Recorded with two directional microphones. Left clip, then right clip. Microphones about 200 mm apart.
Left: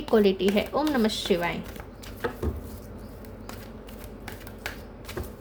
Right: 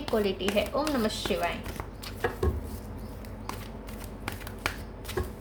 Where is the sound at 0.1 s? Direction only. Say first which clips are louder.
Left 6 dB; 50° left (ahead or behind).